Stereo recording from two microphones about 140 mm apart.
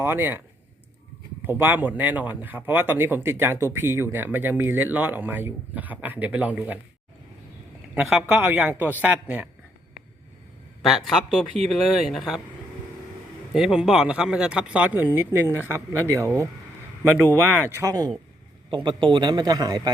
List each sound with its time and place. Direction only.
0.0 s speech: 15° right (ahead or behind)
1.5 s speech: 15° right (ahead or behind)
8.4 s speech: 10° right (ahead or behind)
10.8 s speech: centre (ahead or behind)
13.5 s speech: 5° right (ahead or behind)
17.8 s a man's voice: 30° right (ahead or behind)